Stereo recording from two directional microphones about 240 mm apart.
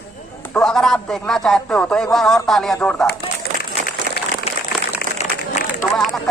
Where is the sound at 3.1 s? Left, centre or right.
Left.